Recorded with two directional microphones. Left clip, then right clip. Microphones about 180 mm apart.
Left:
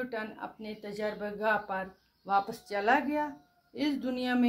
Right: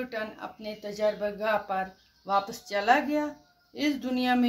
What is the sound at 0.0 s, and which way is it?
Speech, 35° left (ahead or behind).